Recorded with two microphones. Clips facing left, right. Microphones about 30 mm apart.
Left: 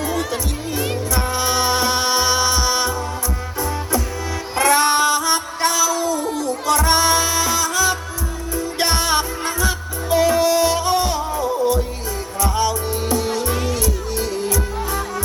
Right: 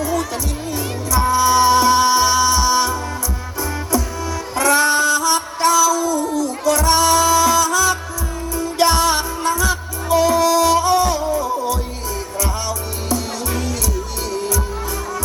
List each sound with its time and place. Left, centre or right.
0.0 s music: left
4.5 s a sound: left
8.5 s music: left